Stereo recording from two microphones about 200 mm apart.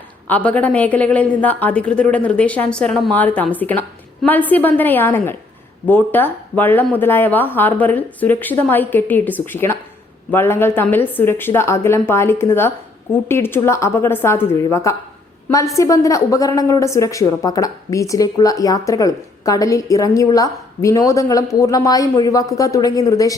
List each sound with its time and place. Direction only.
0.3 s a woman's voice: 5° left (ahead or behind)